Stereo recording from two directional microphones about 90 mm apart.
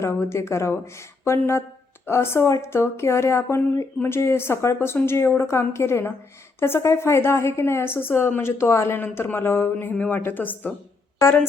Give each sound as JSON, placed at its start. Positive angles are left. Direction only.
{"t": 0.0, "sound": "a woman's voice", "side_deg": 30}